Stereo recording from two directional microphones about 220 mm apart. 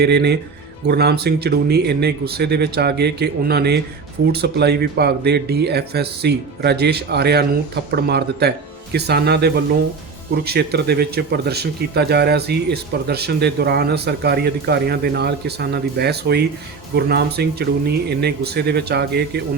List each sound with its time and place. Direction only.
0.0 s speech: 50° right (ahead or behind)